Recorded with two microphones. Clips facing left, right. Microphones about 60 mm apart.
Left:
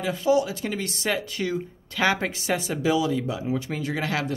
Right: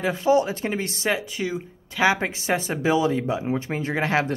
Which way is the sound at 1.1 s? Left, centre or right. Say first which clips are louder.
Even; centre.